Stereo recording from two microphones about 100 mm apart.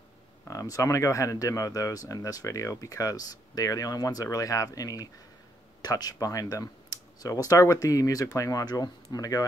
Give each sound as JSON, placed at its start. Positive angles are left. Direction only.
{"t": 0.5, "sound": "speech", "side_deg": 35}